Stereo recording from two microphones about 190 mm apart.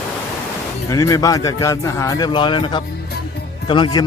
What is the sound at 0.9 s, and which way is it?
A man's voice, 15° left (ahead or behind).